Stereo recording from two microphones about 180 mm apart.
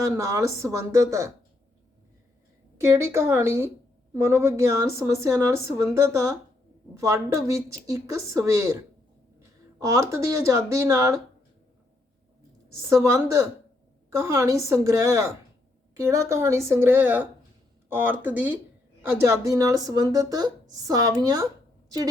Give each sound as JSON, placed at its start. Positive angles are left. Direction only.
{"t": 0.0, "sound": "a woman's voice", "side_deg": -15}
{"t": 2.7, "sound": "a woman's voice", "side_deg": -15}
{"t": 9.8, "sound": "a woman's voice", "side_deg": -15}
{"t": 12.7, "sound": "a woman's voice", "side_deg": -15}